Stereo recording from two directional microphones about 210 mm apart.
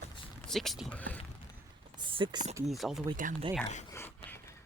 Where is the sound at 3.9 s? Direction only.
10° left (ahead or behind).